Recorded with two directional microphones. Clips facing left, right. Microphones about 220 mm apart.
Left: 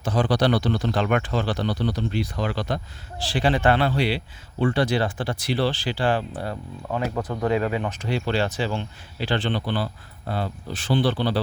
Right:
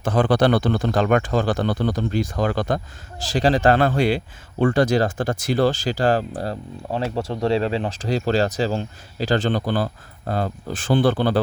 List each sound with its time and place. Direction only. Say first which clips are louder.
0.0 s speech: right 4 dB; 55° right (ahead or behind)